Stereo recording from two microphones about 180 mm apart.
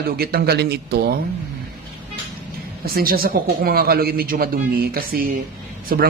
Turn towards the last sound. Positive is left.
turn(degrees=-55)  # may be behind; listen again after turning